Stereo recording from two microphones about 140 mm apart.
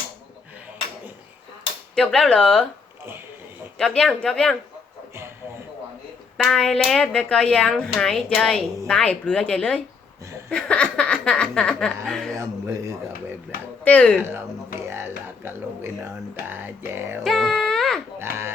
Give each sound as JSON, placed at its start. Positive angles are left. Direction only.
{"t": 2.0, "sound": "speech", "side_deg": 5}
{"t": 3.8, "sound": "speech", "side_deg": 5}
{"t": 6.3, "sound": "speech", "side_deg": 5}
{"t": 12.4, "sound": "a man's voice", "side_deg": -20}
{"t": 13.8, "sound": "speech", "side_deg": 10}
{"t": 14.2, "sound": "music", "side_deg": -15}
{"t": 17.2, "sound": "a sound", "side_deg": 0}
{"t": 18.2, "sound": "speech", "side_deg": -15}